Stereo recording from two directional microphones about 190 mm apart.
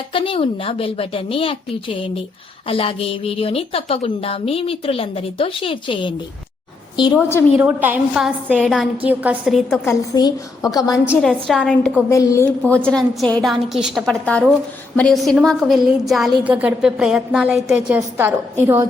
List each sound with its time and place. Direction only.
0.1 s a woman's voice: 30° left (ahead or behind)
7.6 s a woman's voice: 10° right (ahead or behind)
9.8 s a woman's voice: 20° left (ahead or behind)
11.1 s a woman's voice: centre (ahead or behind)